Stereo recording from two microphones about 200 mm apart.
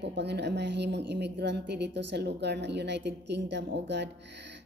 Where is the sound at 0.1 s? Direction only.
55° right (ahead or behind).